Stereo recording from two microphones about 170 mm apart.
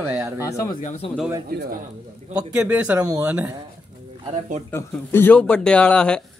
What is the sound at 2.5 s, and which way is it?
Speech, 10° right (ahead or behind).